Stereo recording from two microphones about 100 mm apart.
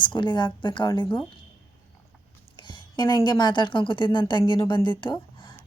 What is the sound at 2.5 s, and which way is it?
A woman's voice, 50° left (ahead or behind).